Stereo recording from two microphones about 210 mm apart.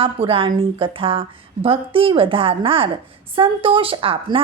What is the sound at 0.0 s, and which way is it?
A woman's voice, 25° right (ahead or behind).